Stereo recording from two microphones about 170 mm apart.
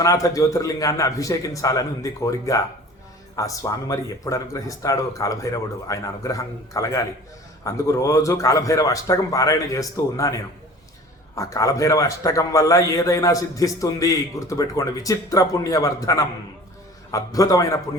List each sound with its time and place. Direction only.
0.0 s a man's voice: 20° left (ahead or behind)